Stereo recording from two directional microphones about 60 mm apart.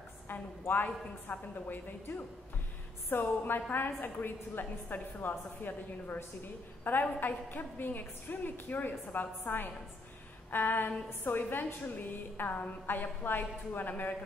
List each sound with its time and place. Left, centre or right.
0.3 s a woman's voice: left
10.5 s a woman's voice: left